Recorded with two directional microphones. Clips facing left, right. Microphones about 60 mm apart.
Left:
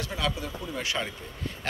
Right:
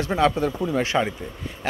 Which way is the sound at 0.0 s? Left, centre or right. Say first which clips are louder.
Right 11 dB; right.